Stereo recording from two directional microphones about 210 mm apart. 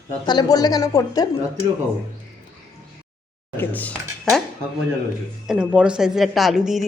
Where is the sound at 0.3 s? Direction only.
20° left (ahead or behind).